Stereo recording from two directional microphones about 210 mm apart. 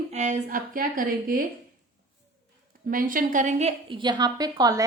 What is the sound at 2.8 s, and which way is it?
A woman's voice, 40° right (ahead or behind).